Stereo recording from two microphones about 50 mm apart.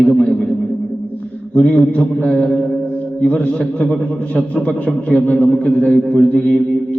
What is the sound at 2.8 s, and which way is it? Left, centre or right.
A man's voice, left.